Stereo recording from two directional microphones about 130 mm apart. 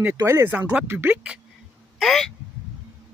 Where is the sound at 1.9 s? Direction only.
Centre (ahead or behind).